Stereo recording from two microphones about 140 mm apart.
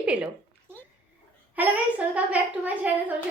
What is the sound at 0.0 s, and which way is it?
Speech, 10° right (ahead or behind).